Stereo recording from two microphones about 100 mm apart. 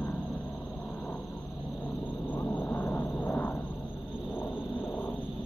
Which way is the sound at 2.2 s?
15° left (ahead or behind).